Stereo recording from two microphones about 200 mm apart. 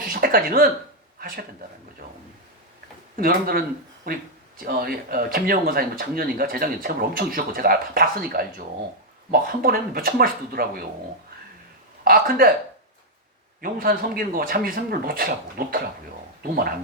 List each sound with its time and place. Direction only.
0.1 s speech: 45° right (ahead or behind)
3.2 s speech: 45° right (ahead or behind)
12.0 s speech: 45° right (ahead or behind)
13.6 s speech: 45° right (ahead or behind)